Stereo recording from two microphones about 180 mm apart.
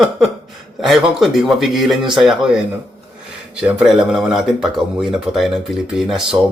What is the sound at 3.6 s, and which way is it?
Speech, 5° right (ahead or behind).